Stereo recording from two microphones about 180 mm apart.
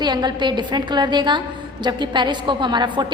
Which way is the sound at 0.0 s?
25° right (ahead or behind).